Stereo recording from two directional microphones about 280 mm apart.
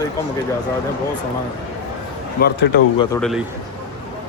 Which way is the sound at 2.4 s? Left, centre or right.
Left.